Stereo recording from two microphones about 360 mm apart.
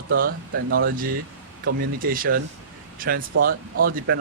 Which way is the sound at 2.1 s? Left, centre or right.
Right.